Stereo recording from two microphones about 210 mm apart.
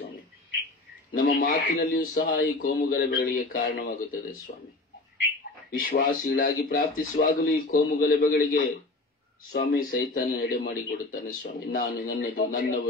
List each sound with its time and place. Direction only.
1.3 s a man's voice: 45° left (ahead or behind)
5.7 s a man's voice: 40° left (ahead or behind)